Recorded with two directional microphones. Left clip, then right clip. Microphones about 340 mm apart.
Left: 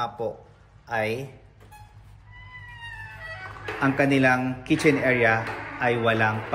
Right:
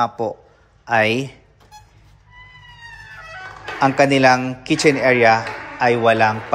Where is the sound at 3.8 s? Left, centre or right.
Centre.